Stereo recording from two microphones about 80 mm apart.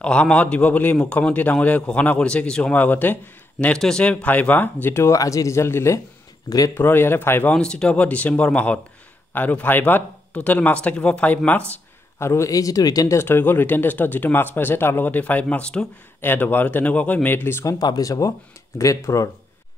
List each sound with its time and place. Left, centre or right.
0.0 s a man's voice: centre
3.6 s speech: centre; by 7.5 s left
7.5 s a man's voice: centre
12.2 s speech: left
13.2 s a man's voice: left; by 15.9 s centre
16.2 s speech: left
17.6 s speech: left